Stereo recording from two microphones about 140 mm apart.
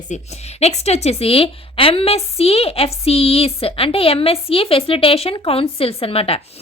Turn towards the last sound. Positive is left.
turn(degrees=45)  # may be behind; listen again after turning